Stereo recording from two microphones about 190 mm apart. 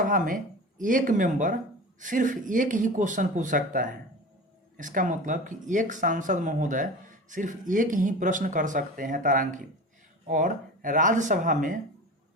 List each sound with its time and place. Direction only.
0.0 s speech: 45° right (ahead or behind)